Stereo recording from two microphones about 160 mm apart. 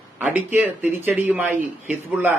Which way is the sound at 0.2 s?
10° right (ahead or behind).